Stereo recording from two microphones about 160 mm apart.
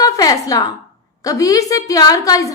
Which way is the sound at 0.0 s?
25° left (ahead or behind).